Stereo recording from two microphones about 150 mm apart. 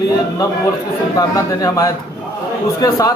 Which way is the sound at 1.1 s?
25° left (ahead or behind).